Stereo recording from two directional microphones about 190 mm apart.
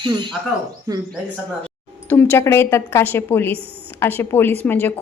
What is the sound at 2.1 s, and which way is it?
A woman's voice, 10° left (ahead or behind).